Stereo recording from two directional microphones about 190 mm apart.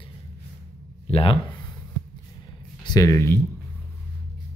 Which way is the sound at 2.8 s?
20° left (ahead or behind).